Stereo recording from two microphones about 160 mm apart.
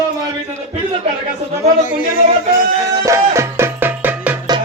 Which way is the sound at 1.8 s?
60° left (ahead or behind).